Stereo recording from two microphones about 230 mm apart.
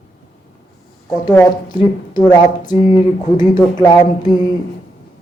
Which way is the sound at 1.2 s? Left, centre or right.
Centre.